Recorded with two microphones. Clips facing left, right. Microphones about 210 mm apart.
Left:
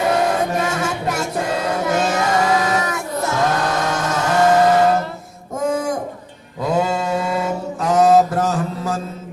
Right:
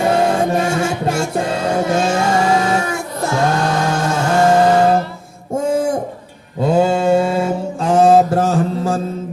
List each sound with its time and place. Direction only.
0.1 s music: 30° right (ahead or behind)
3.7 s vehicle: 30° right (ahead or behind)
5.5 s a sound: 30° right (ahead or behind)
6.6 s mantra: 30° right (ahead or behind)